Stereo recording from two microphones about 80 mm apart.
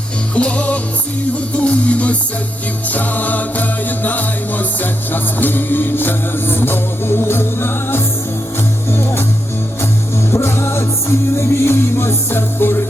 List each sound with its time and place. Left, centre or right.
0.3 s music: centre
10.3 s music: left